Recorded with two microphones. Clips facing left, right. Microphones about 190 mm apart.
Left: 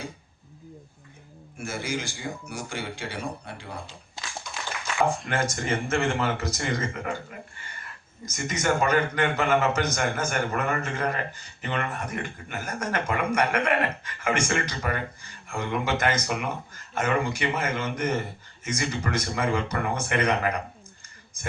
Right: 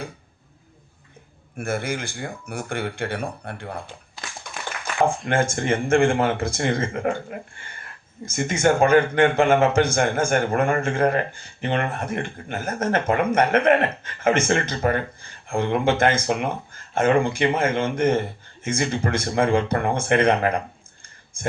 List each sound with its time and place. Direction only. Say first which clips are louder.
1.5 s speech: right 5 dB; 55° right (ahead or behind)
5.2 s speech: right 6 dB; 50° right (ahead or behind)